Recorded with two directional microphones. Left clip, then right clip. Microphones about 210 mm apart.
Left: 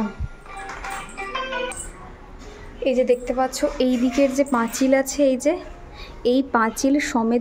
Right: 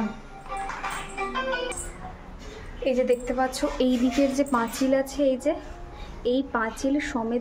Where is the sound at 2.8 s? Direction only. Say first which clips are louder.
Left 4 dB; 20° left (ahead or behind).